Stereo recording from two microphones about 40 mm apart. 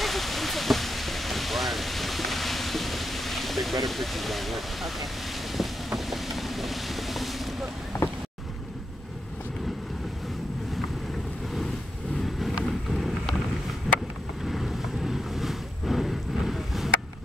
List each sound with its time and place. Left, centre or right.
0.0 s a sound: centre
5.9 s boat: centre
12.4 s vehicle: centre